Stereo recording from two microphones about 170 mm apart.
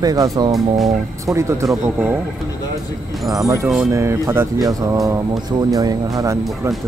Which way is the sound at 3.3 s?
15° right (ahead or behind).